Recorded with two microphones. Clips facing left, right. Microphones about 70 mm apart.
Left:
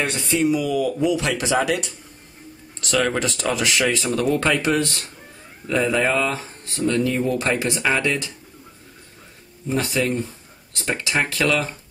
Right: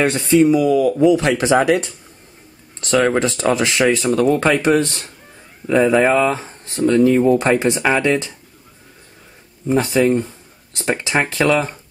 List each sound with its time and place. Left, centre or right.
0.0 s speech: right
9.7 s speech: right